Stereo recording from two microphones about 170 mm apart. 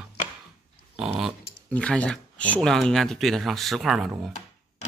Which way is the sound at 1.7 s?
5° left (ahead or behind).